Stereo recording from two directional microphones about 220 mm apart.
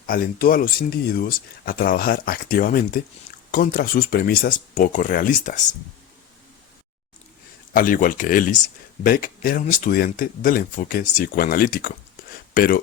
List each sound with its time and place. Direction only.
0.1 s speech: 40° left (ahead or behind)
7.7 s speech: 40° left (ahead or behind)